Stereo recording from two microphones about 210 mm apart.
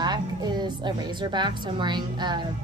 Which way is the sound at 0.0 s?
20° right (ahead or behind).